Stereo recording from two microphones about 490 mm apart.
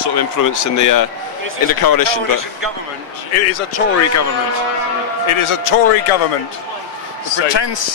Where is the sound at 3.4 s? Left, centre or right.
Left.